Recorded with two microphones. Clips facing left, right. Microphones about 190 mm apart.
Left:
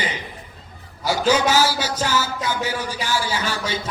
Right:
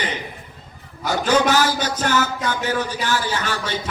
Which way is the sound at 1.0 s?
10° left (ahead or behind).